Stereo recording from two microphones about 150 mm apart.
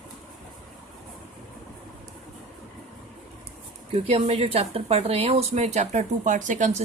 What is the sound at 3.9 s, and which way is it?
Speech, 45° right (ahead or behind).